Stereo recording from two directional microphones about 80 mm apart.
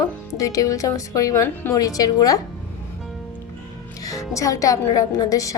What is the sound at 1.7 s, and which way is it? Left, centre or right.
Speech, left.